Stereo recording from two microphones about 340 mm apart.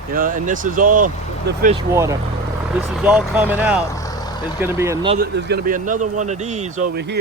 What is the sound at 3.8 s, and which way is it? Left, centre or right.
Vehicle, centre.